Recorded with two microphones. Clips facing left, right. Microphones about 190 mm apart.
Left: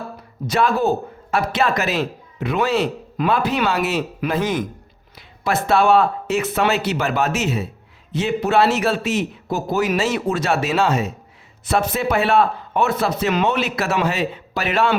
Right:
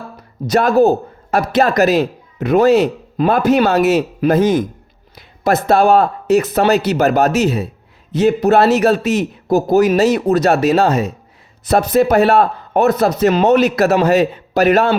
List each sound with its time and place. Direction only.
0.4 s a man's voice: 40° right (ahead or behind)